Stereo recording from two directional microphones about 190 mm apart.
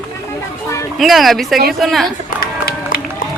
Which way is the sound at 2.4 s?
50° left (ahead or behind).